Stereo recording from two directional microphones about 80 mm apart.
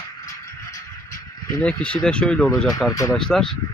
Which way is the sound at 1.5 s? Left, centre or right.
Centre.